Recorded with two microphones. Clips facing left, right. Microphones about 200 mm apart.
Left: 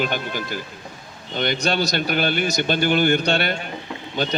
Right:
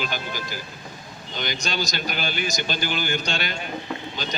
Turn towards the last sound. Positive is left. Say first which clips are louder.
# left 6 dB
turn(degrees=55)  # may be behind; listen again after turning